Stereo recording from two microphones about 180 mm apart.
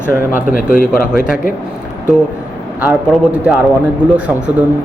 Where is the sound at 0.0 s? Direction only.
15° right (ahead or behind).